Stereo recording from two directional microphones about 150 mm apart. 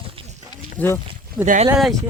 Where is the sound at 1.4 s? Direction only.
60° right (ahead or behind).